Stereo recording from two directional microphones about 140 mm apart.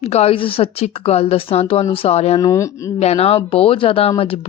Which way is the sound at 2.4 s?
20° left (ahead or behind).